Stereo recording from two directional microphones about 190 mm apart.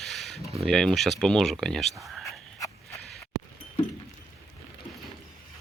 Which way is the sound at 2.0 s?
Centre (ahead or behind).